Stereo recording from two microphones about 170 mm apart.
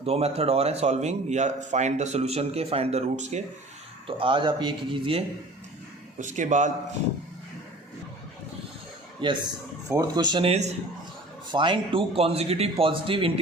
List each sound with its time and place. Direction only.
0.0 s a man's voice: 40° right (ahead or behind)
4.0 s a man's voice: 30° right (ahead or behind)
6.1 s a man's voice: 45° right (ahead or behind)
9.2 s speech: 30° right (ahead or behind)
10.4 s a man's voice: 40° right (ahead or behind)